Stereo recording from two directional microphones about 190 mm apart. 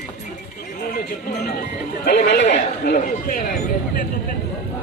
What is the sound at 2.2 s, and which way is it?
Speech, 65° left (ahead or behind).